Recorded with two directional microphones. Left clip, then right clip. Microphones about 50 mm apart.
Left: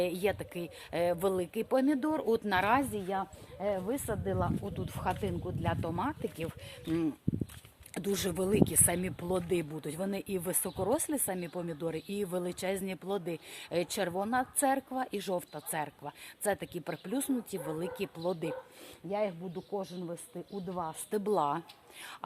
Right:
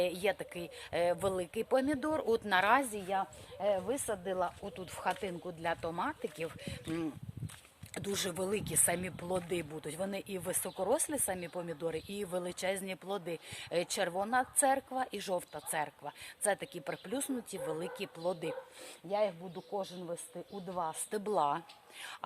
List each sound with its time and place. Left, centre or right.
0.0 s speech: centre
3.9 s speech: centre
4.3 s speech: left
7.9 s speech: left; by 18.5 s centre
19.0 s speech: centre
21.2 s speech: centre